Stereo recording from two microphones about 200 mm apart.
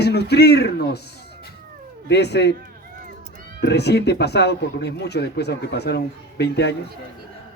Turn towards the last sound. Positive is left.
turn(degrees=55)  # may be behind; listen again after turning